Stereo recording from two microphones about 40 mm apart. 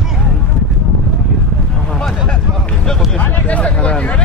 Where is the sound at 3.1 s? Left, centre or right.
Left.